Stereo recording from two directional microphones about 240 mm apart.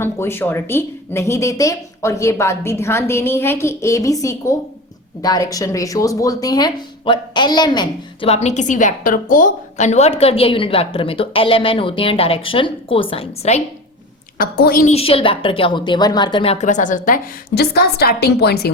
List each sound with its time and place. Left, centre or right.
0.0 s a woman's voice: centre
14.3 s speech: left